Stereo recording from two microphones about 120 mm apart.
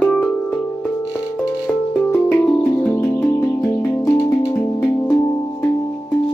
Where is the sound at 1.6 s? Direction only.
10° left (ahead or behind).